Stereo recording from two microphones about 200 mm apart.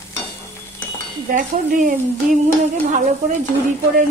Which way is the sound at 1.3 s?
40° right (ahead or behind).